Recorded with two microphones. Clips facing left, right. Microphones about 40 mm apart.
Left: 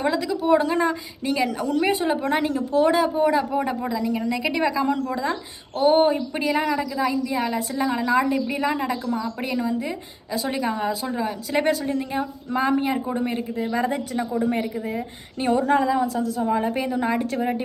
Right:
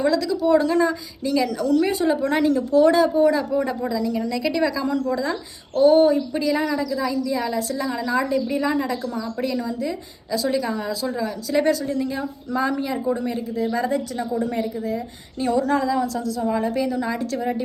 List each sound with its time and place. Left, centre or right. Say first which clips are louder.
0.0 s a woman's voice: right 3 dB; left